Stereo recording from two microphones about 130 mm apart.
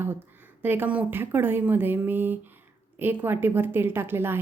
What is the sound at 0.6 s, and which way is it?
A woman's voice, 15° right (ahead or behind).